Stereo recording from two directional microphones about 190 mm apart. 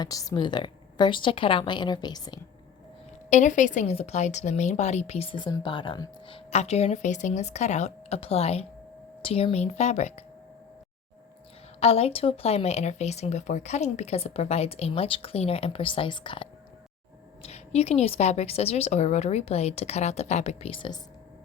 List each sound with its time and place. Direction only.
0.0 s a woman's voice: 20° left (ahead or behind)
3.2 s speech: 40° left (ahead or behind)
11.8 s speech: 30° left (ahead or behind)